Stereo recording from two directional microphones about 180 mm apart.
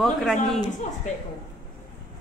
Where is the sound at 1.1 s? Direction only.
40° left (ahead or behind).